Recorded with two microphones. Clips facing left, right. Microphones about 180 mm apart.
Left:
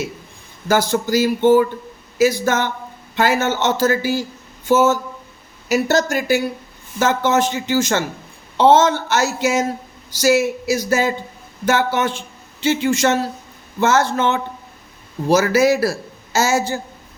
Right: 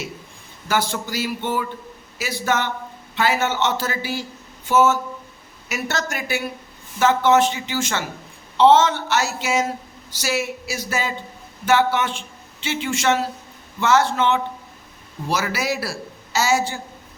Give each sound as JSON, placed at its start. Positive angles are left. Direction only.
{"t": 0.7, "sound": "a woman's voice", "side_deg": 40}